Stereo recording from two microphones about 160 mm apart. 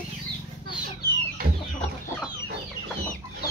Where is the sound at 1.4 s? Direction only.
65° right (ahead or behind).